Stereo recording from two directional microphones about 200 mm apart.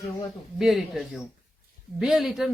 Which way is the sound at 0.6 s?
Centre (ahead or behind).